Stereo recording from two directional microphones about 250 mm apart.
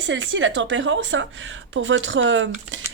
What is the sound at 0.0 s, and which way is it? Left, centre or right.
A woman's voice, right.